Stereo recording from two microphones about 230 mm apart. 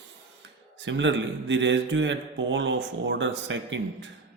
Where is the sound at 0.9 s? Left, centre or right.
Right.